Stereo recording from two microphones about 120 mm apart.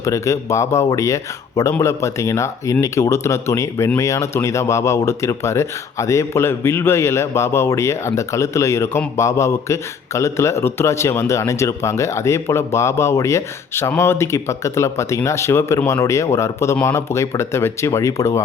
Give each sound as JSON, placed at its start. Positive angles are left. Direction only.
{"t": 0.0, "sound": "speech", "side_deg": 25}